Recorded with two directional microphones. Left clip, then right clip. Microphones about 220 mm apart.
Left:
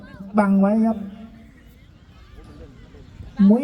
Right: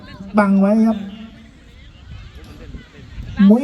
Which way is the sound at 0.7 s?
30° right (ahead or behind).